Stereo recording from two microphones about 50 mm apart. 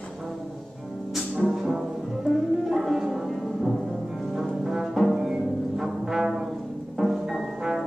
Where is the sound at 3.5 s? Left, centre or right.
Centre.